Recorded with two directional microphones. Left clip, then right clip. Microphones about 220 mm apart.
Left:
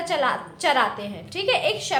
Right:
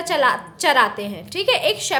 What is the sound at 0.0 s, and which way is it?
A woman's voice, 50° right (ahead or behind).